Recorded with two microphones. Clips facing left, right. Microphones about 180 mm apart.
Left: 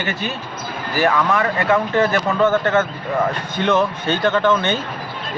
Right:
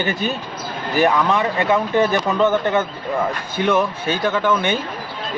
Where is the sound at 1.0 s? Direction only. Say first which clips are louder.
Even; 20° right (ahead or behind).